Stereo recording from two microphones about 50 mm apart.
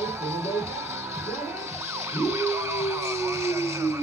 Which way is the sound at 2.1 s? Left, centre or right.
Right.